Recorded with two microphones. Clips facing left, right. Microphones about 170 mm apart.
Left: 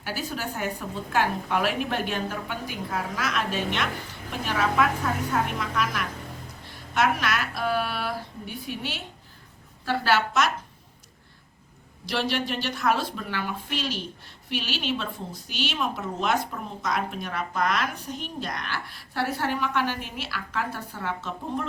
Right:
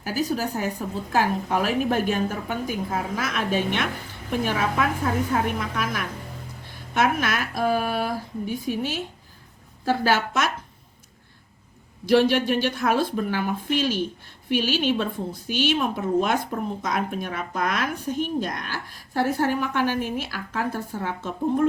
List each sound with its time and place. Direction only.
0.0 s a woman's voice: 40° right (ahead or behind)
12.0 s a woman's voice: 50° right (ahead or behind)